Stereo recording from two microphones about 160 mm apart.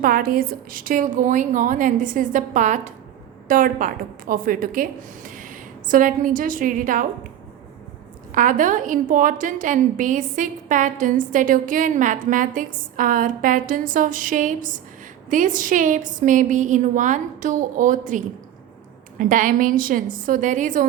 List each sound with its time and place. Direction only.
0.0 s a woman's voice: 65° right (ahead or behind)
8.3 s a woman's voice: 55° right (ahead or behind)
19.2 s a woman's voice: 55° right (ahead or behind)